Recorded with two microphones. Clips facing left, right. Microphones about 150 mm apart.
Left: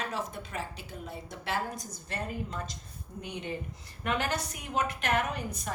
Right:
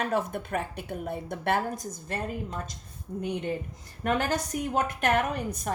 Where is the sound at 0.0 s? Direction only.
55° right (ahead or behind).